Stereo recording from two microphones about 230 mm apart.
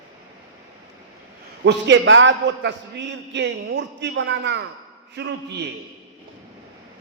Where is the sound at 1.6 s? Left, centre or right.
Right.